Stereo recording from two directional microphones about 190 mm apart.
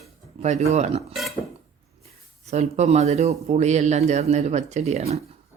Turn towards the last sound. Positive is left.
turn(degrees=-35)  # may be behind; listen again after turning